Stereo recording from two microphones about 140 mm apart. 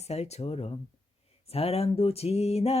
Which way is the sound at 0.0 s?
50° left (ahead or behind).